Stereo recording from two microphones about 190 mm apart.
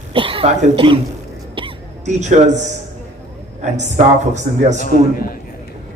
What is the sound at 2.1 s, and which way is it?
Speech, 40° right (ahead or behind).